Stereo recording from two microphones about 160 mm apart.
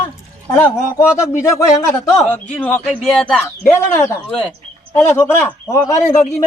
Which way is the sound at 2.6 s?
10° left (ahead or behind).